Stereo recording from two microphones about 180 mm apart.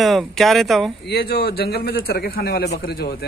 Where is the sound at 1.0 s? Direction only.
60° left (ahead or behind).